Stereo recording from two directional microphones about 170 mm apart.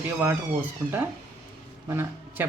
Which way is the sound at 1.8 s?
15° right (ahead or behind).